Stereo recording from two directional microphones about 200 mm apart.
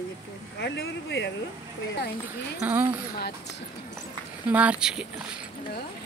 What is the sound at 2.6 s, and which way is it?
Speech, 10° right (ahead or behind).